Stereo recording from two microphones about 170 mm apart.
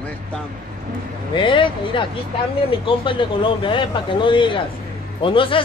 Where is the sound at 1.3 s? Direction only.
30° left (ahead or behind).